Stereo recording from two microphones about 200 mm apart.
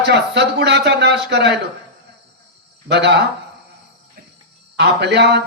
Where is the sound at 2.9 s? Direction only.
60° right (ahead or behind).